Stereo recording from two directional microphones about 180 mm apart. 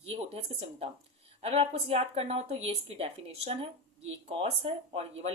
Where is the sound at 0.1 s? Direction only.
35° right (ahead or behind).